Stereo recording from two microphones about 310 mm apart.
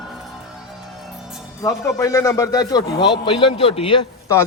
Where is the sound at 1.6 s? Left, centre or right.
Centre.